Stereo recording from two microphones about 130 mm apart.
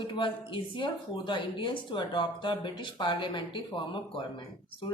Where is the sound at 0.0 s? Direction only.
40° left (ahead or behind).